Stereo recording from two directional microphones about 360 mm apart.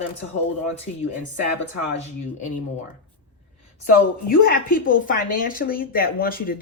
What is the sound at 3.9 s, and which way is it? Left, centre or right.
Speech, left.